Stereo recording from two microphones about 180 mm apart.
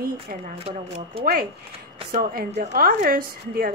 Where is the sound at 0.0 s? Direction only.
50° right (ahead or behind).